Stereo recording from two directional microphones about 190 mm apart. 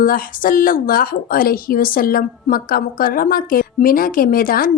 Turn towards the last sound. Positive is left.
turn(degrees=50)  # may be behind; listen again after turning